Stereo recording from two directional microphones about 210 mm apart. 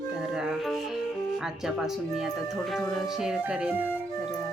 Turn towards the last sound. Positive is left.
turn(degrees=-5)  # may be behind; listen again after turning